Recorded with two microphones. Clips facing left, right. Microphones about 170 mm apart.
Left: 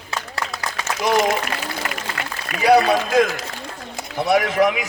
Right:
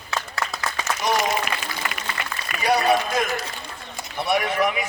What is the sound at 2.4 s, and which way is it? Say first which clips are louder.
A man's voice: left 6 dB; 90° left.